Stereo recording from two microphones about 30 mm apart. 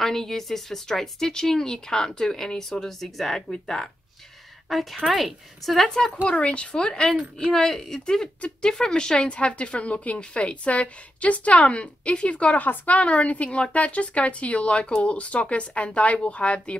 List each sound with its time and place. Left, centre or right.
0.0 s speech: centre
3.6 s speech: centre
4.6 s a woman's voice: centre
6.2 s a woman's voice: left
7.5 s a woman's voice: centre; by 16.7 s left